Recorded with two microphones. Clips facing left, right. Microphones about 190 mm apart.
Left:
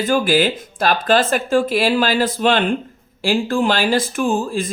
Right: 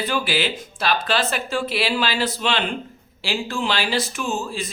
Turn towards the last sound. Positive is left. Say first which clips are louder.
# left 7 dB
turn(degrees=50)  # may be behind; listen again after turning